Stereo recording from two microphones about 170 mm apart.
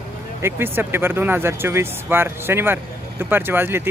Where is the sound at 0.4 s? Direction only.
15° right (ahead or behind).